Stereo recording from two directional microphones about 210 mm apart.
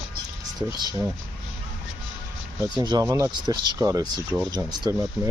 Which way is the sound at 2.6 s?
20° right (ahead or behind).